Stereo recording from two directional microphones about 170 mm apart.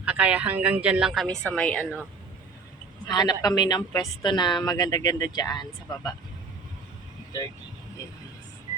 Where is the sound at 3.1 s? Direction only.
25° left (ahead or behind).